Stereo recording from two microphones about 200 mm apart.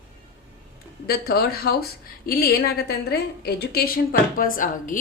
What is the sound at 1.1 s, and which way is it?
Speech, 50° left (ahead or behind).